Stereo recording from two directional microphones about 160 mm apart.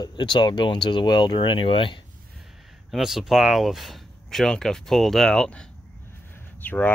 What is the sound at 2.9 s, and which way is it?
Speech, centre (ahead or behind).